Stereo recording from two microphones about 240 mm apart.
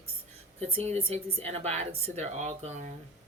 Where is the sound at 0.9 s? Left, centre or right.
Right.